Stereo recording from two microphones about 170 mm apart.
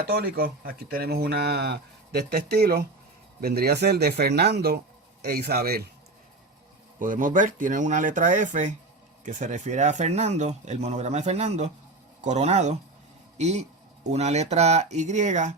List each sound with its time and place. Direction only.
0.1 s speech: 65° right (ahead or behind)
7.0 s a man's voice: 50° right (ahead or behind)